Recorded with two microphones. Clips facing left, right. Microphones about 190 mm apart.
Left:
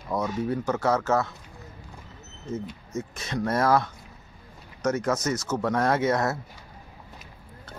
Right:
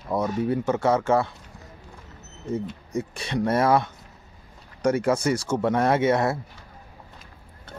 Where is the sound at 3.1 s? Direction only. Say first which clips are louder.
Right 3 dB; 30° right (ahead or behind).